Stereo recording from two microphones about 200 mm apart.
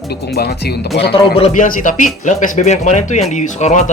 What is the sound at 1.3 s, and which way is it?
Speech, 35° left (ahead or behind).